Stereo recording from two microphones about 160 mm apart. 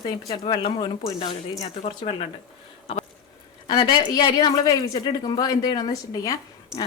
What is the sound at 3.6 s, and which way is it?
Speech, 30° left (ahead or behind).